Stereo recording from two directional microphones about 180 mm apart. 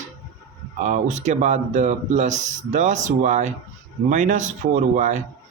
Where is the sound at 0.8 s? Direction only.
40° right (ahead or behind).